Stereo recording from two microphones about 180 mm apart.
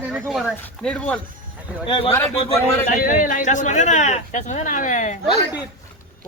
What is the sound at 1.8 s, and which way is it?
Speech, 25° left (ahead or behind).